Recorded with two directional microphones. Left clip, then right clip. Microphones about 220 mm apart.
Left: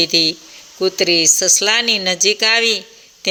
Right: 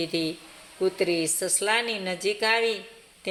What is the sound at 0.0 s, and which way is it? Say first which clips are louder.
A man's voice: left 14 dB; 40° left (ahead or behind).